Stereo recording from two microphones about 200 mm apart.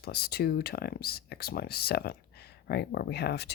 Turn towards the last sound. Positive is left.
turn(degrees=55)  # may be behind; listen again after turning